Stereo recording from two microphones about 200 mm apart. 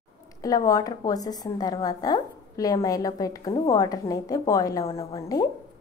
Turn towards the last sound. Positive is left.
turn(degrees=20)  # may be behind; listen again after turning